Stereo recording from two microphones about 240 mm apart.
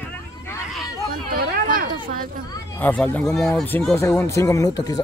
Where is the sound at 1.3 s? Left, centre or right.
Right.